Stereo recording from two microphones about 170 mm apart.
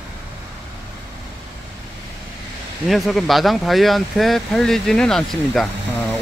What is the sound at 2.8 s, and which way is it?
Speech, centre (ahead or behind).